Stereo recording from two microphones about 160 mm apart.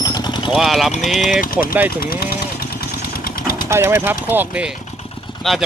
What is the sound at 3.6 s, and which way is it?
Speech, 15° right (ahead or behind).